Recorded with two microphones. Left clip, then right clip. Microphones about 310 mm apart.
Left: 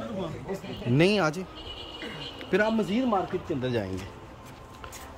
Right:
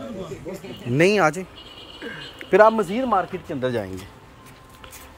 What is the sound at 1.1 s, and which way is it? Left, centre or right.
Speech, centre.